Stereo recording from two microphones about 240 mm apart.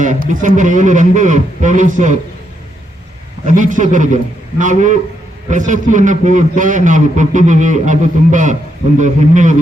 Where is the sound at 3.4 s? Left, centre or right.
Right.